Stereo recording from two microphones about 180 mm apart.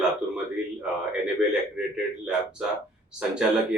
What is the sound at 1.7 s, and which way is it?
Speech, 5° right (ahead or behind).